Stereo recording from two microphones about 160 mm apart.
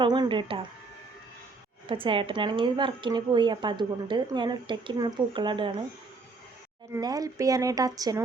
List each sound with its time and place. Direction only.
0.0 s speech: 30° right (ahead or behind)
1.9 s a woman's voice: 30° right (ahead or behind)
6.9 s a woman's voice: 20° right (ahead or behind)